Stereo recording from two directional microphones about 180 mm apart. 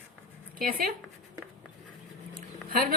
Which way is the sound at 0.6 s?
50° right (ahead or behind).